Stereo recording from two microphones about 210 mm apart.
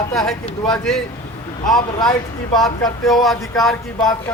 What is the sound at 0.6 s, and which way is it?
Speech, 5° left (ahead or behind).